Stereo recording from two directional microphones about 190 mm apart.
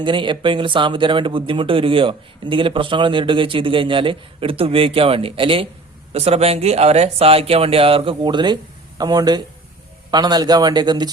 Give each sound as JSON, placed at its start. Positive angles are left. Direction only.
{"t": 0.0, "sound": "speech", "side_deg": -25}